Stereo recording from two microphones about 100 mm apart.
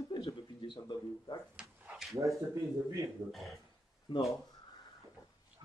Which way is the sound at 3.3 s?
Centre (ahead or behind).